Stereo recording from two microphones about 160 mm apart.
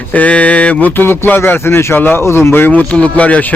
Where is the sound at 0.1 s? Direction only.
10° left (ahead or behind).